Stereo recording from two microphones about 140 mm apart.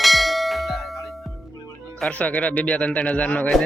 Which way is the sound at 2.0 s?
10° left (ahead or behind).